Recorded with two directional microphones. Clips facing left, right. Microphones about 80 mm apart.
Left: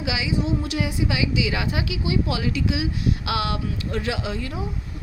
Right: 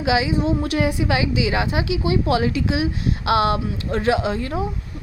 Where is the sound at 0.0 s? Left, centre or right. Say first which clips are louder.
Right 6 dB; right.